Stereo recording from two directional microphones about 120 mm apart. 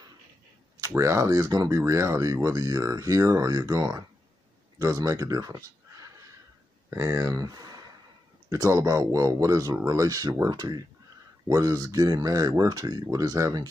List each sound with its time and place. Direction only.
0.7 s speech: 30° right (ahead or behind)